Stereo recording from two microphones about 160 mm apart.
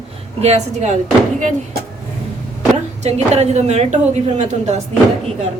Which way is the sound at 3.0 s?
45° right (ahead or behind).